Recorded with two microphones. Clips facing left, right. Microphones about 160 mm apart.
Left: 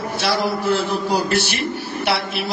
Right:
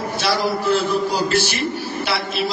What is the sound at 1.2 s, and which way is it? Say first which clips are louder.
A man's voice: right 1 dB; 60° left (ahead or behind).